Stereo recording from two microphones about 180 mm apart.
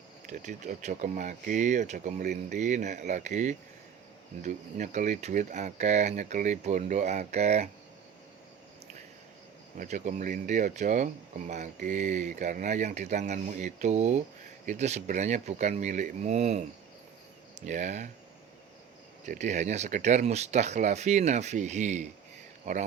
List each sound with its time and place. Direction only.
0.3 s speech: 40° right (ahead or behind)
9.7 s speech: 45° right (ahead or behind)
17.7 s speech: 40° right (ahead or behind)
19.2 s speech: 40° right (ahead or behind)